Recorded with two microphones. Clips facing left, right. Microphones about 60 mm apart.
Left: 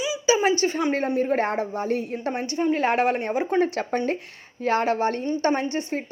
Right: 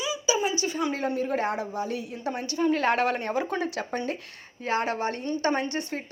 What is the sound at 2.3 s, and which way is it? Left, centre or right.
Speech, left.